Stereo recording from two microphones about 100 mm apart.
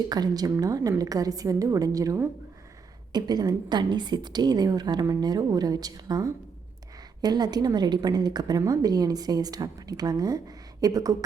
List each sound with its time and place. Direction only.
0.1 s a woman's voice: 40° right (ahead or behind)